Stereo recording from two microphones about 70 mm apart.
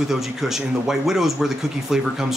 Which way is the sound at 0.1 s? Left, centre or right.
Centre.